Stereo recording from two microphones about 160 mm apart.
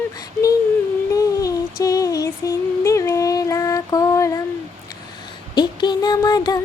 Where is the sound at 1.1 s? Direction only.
20° left (ahead or behind).